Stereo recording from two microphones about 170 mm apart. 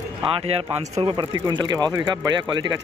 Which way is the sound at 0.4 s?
30° right (ahead or behind).